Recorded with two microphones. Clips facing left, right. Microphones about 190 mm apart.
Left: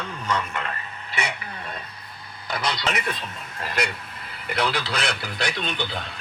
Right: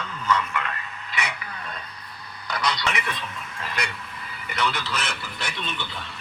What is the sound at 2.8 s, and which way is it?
Speech, 40° left (ahead or behind).